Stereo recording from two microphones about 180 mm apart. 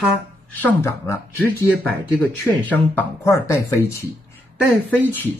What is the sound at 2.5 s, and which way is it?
Speech, 5° left (ahead or behind).